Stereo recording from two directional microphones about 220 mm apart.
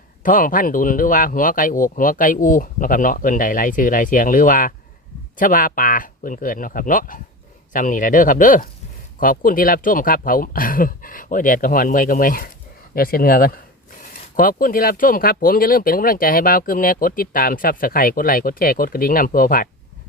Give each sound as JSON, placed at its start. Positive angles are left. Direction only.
{"t": 0.2, "sound": "speech", "side_deg": 35}